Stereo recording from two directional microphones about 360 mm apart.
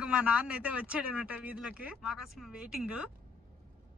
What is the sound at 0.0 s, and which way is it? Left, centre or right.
A woman's voice, centre.